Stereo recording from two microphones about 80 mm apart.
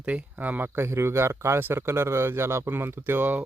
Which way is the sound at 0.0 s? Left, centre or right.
Centre.